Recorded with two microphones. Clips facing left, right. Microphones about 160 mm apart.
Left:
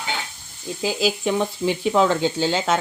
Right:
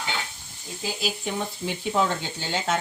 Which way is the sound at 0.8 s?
90° left.